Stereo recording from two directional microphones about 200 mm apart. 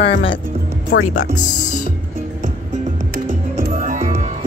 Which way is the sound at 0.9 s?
65° left (ahead or behind).